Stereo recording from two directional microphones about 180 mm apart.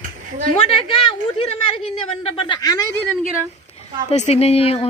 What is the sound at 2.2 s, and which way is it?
Speech, 25° left (ahead or behind).